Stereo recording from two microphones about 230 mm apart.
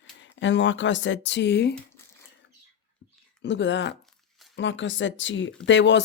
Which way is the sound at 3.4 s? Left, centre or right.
Left.